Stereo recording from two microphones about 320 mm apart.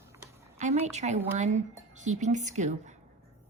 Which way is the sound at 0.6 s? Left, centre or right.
Right.